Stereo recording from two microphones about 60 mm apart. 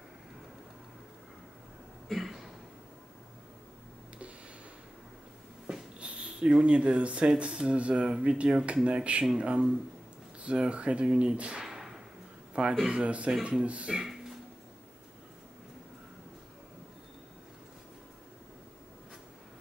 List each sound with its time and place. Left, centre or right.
2.0 s a sound: centre
5.9 s speech: centre
11.6 s whip: centre
12.7 s speech: centre